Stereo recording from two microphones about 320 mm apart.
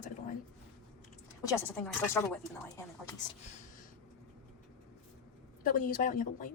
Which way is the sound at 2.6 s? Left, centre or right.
Centre.